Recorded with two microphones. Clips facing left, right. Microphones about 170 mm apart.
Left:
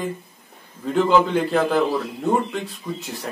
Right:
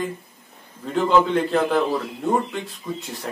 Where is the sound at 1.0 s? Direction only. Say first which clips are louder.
Right 2 dB; centre (ahead or behind).